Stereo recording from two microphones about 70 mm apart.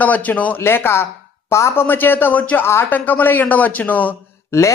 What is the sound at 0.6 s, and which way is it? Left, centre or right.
Speech, left.